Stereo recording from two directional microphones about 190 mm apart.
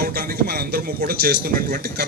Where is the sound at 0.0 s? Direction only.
50° right (ahead or behind).